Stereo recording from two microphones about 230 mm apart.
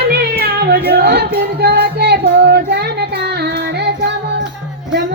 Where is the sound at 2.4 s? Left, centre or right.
Right.